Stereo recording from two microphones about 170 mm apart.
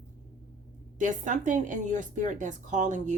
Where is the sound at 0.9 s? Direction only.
45° right (ahead or behind).